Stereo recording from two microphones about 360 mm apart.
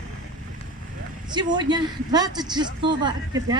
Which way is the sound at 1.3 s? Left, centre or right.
Centre.